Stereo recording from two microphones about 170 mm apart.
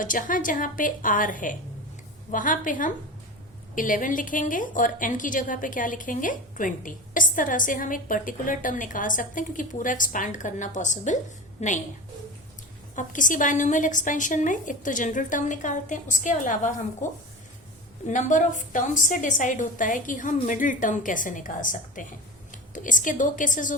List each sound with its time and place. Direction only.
0.0 s a woman's voice: 50° left (ahead or behind)
13.0 s a woman's voice: 50° left (ahead or behind)